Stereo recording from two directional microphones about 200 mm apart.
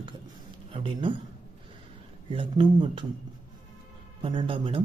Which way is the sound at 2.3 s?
25° right (ahead or behind).